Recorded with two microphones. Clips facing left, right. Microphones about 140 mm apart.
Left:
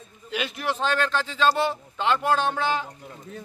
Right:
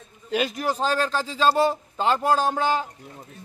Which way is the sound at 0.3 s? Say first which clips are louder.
Right 4 dB; 40° right (ahead or behind).